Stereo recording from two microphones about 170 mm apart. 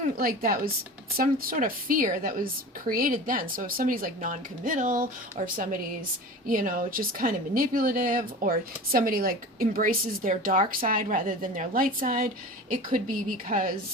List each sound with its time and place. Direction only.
0.2 s a woman's voice: 60° right (ahead or behind)
5.4 s speech: 40° right (ahead or behind)
6.5 s a woman's voice: 55° right (ahead or behind)